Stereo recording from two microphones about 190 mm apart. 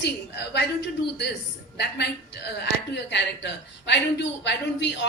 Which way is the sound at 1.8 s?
60° left (ahead or behind).